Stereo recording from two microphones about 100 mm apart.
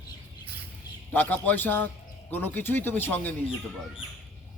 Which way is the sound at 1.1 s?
15° left (ahead or behind).